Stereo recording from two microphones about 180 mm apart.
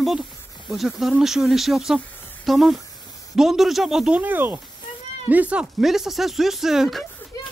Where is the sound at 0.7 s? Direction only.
Centre (ahead or behind).